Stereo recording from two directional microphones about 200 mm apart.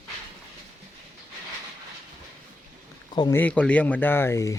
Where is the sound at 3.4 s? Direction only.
5° left (ahead or behind).